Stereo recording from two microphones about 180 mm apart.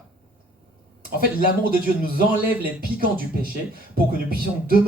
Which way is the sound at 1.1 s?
55° right (ahead or behind).